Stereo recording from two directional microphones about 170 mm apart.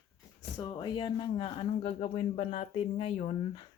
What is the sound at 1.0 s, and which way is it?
Speech, 30° left (ahead or behind).